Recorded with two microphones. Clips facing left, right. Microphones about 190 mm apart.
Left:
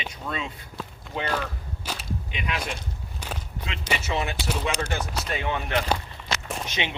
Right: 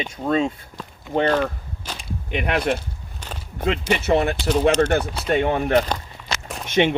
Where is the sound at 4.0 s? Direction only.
60° right (ahead or behind).